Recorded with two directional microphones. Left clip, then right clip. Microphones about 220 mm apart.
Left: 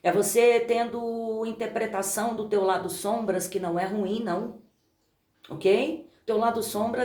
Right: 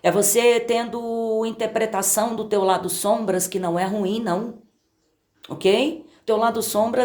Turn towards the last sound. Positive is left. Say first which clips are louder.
# right 7 dB
turn(degrees=-50)  # may be behind; listen again after turning